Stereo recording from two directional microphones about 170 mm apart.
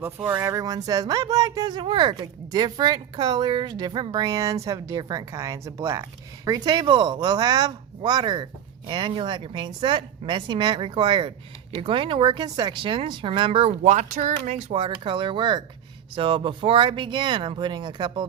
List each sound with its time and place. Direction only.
0.0 s speech: 10° right (ahead or behind)